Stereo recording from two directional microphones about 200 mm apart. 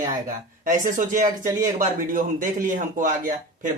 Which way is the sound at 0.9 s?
40° right (ahead or behind).